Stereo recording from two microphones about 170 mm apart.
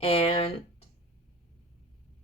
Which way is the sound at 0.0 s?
35° left (ahead or behind).